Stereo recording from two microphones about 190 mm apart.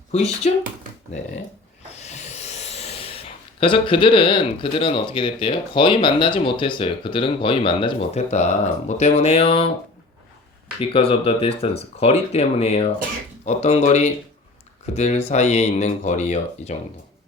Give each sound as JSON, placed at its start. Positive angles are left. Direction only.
{"t": 0.1, "sound": "speech", "side_deg": 35}
{"t": 1.9, "sound": "rub", "side_deg": 35}
{"t": 3.6, "sound": "speech", "side_deg": 25}
{"t": 10.8, "sound": "speech", "side_deg": 30}